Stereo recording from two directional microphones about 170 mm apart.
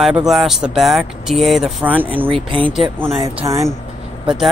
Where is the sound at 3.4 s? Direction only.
20° right (ahead or behind).